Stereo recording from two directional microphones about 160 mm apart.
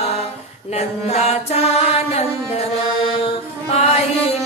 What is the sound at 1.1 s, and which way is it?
Music, 40° left (ahead or behind).